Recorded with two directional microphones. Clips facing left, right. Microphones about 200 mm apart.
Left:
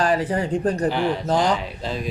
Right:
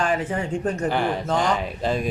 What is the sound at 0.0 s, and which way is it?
Speech, 35° left (ahead or behind).